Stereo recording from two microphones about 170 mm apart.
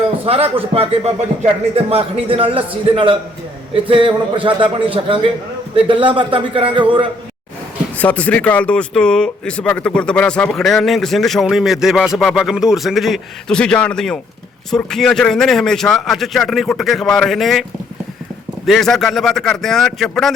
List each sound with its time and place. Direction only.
0.3 s a man's voice: 35° right (ahead or behind)
7.9 s speech: 10° left (ahead or behind)